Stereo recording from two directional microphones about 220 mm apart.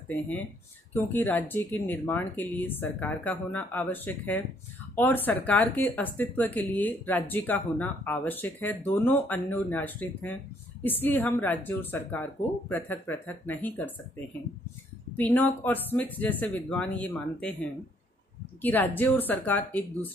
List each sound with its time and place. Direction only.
0.9 s speech: 10° left (ahead or behind)